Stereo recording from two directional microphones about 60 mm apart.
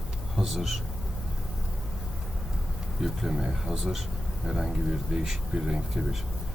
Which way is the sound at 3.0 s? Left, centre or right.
Centre.